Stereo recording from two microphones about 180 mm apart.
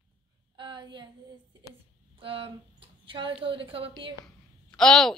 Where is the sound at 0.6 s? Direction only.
25° right (ahead or behind).